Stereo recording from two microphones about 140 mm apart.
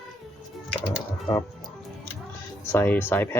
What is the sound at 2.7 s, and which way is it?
Speech, 15° left (ahead or behind).